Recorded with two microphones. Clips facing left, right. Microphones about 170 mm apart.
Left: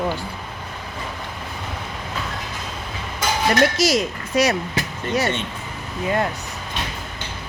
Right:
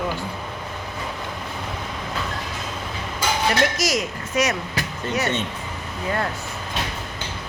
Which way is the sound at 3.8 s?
30° left (ahead or behind).